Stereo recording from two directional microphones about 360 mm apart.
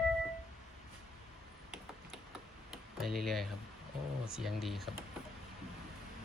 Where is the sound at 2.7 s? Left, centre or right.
Centre.